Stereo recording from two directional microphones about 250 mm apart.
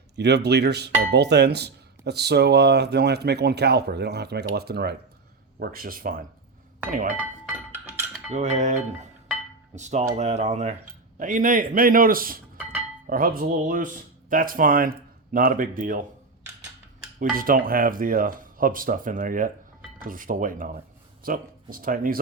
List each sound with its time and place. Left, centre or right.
0.2 s speech: right
7.7 s music: centre
8.3 s dishes: right
11.2 s speech: right
17.3 s speech: right